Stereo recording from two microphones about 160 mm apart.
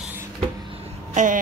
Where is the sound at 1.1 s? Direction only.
50° right (ahead or behind).